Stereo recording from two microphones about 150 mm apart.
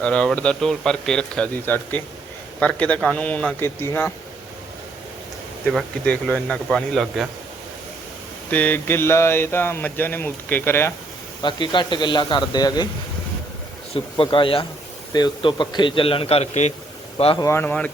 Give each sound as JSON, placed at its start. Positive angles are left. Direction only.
{"t": 0.0, "sound": "speech", "side_deg": 10}
{"t": 5.7, "sound": "speech", "side_deg": 5}
{"t": 8.4, "sound": "speech", "side_deg": 10}
{"t": 11.4, "sound": "a man's voice", "side_deg": 30}
{"t": 13.9, "sound": "a man's voice", "side_deg": 35}
{"t": 17.3, "sound": "speech", "side_deg": 20}